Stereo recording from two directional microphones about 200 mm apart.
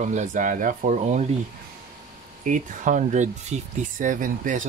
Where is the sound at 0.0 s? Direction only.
35° right (ahead or behind).